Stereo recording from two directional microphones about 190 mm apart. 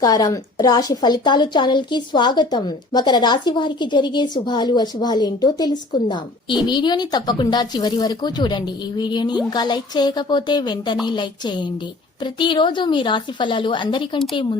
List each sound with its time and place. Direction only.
0.0 s a woman's voice: 20° left (ahead or behind)